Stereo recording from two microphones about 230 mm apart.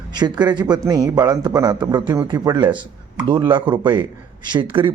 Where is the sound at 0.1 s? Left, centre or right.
Centre.